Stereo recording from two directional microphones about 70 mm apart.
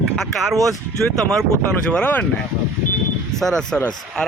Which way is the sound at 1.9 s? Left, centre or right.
Centre.